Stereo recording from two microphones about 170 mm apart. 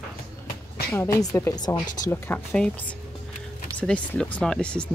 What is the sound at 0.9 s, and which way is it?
Speech, 15° left (ahead or behind).